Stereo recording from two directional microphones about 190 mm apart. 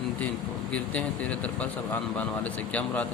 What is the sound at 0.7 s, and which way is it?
Speech, 5° left (ahead or behind).